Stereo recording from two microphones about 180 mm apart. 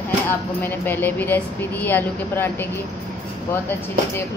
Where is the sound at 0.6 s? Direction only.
10° left (ahead or behind).